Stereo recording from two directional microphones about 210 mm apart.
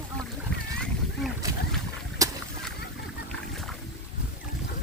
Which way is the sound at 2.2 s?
15° right (ahead or behind).